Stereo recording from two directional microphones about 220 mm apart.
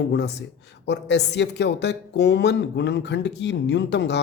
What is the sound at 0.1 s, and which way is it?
A woman's voice, 50° left (ahead or behind).